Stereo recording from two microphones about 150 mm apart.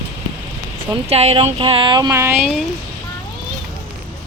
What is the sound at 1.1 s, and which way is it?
Speech, 45° right (ahead or behind).